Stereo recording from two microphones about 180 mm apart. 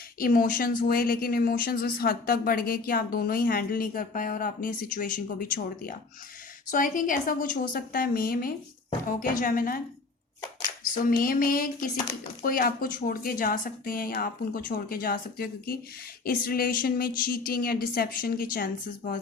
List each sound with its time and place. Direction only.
0.2 s speech: 55° left (ahead or behind)
10.9 s speech: 50° left (ahead or behind)